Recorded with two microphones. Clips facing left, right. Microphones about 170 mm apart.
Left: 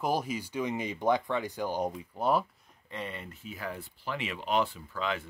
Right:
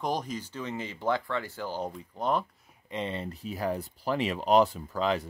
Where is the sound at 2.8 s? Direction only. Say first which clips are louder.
Right 6 dB; 25° right (ahead or behind).